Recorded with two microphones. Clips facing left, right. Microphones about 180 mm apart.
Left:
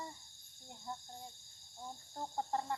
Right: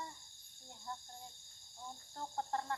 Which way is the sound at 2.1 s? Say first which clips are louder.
Left 2 dB; 15° left (ahead or behind).